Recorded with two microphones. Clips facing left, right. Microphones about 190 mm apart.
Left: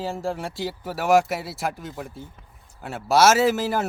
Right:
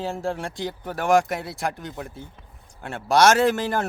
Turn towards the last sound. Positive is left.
turn(degrees=5)  # may be behind; listen again after turning